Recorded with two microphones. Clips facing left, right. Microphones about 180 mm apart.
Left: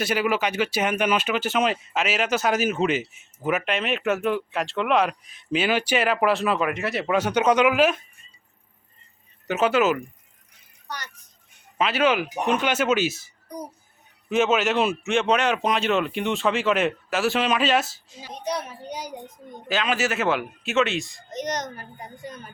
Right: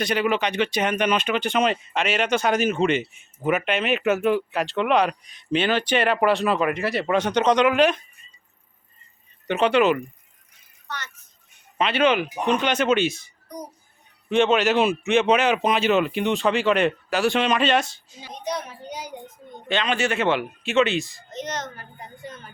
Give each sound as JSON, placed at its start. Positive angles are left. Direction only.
{"t": 0.0, "sound": "speech", "side_deg": 5}
{"t": 9.5, "sound": "speech", "side_deg": 5}
{"t": 10.8, "sound": "a sound", "side_deg": 15}
{"t": 11.8, "sound": "speech", "side_deg": 5}
{"t": 21.2, "sound": "a child's voice", "side_deg": 15}